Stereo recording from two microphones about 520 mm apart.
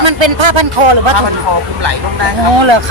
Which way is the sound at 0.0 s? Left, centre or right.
Right.